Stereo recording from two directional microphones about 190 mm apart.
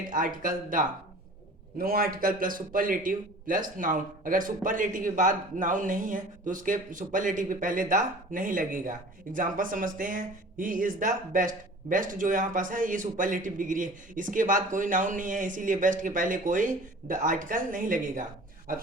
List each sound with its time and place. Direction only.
0.1 s a man's voice: 45° right (ahead or behind)